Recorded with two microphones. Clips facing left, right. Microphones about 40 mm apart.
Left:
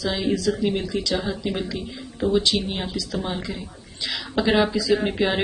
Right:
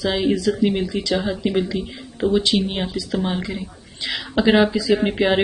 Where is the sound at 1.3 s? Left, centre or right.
Centre.